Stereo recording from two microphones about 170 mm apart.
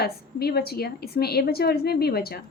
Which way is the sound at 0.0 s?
65° left (ahead or behind).